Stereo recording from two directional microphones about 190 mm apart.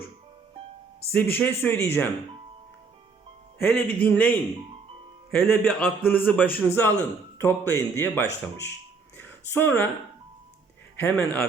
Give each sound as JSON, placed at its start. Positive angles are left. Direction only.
{"t": 1.1, "sound": "speech", "side_deg": 10}
{"t": 3.6, "sound": "speech", "side_deg": 10}
{"t": 9.1, "sound": "a sound", "side_deg": 10}
{"t": 10.9, "sound": "speech", "side_deg": 10}